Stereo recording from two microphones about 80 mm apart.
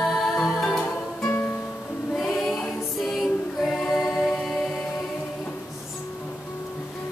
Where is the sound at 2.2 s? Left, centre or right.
Centre.